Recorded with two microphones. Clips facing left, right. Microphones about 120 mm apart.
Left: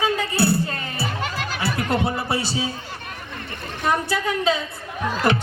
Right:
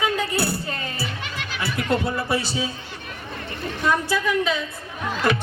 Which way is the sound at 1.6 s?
25° left (ahead or behind).